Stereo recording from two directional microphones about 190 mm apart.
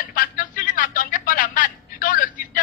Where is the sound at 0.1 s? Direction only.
45° left (ahead or behind).